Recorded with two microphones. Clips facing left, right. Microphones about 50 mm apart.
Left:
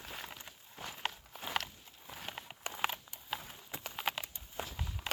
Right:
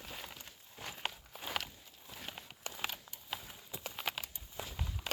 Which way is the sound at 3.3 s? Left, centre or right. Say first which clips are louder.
Left 3 dB; centre.